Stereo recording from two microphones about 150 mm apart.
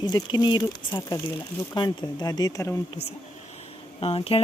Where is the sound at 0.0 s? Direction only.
30° left (ahead or behind).